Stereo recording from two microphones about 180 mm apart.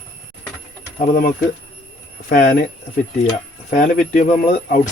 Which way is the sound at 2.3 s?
55° left (ahead or behind).